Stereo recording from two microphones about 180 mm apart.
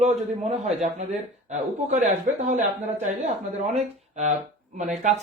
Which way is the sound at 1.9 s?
45° right (ahead or behind).